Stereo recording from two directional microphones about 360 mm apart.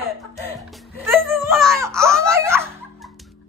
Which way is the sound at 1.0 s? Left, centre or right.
Centre.